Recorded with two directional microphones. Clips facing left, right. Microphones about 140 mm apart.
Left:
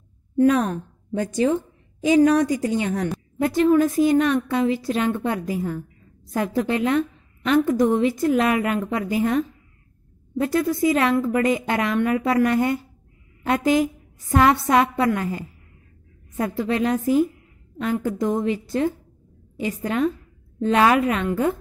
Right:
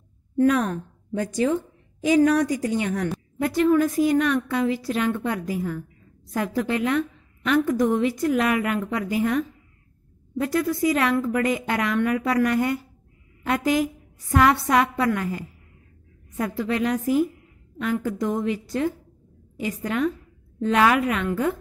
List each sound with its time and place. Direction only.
0.4 s a woman's voice: 25° left (ahead or behind)